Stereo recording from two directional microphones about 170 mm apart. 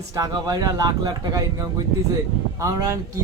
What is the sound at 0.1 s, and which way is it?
Speech, 20° right (ahead or behind).